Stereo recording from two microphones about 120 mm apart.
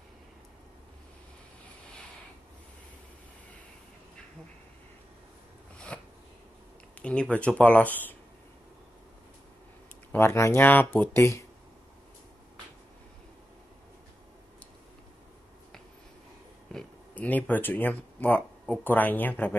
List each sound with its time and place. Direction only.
5.9 s a sound: 10° left (ahead or behind)
7.0 s speech: 10° left (ahead or behind)
10.1 s speech: 20° left (ahead or behind)
16.7 s speech: 10° left (ahead or behind)